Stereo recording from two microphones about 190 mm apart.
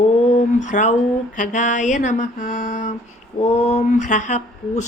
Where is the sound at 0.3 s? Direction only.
40° left (ahead or behind).